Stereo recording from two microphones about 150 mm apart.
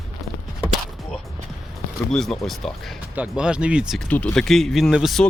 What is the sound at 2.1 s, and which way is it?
Speech, 5° left (ahead or behind).